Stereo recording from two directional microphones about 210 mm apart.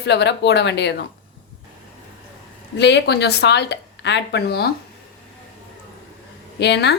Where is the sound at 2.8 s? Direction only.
55° left (ahead or behind).